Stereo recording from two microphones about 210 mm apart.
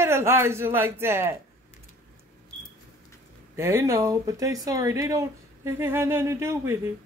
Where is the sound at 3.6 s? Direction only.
15° right (ahead or behind).